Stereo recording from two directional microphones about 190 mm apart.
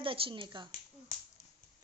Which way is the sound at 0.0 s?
25° right (ahead or behind).